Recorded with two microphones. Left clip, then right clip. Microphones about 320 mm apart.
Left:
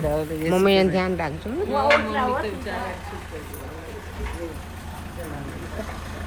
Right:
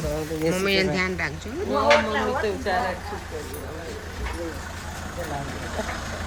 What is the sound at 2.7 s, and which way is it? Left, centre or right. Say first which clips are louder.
Speech: right 6 dB; centre.